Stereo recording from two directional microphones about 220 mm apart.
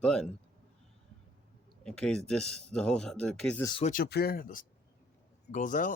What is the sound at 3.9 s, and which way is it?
Speech, 45° left (ahead or behind).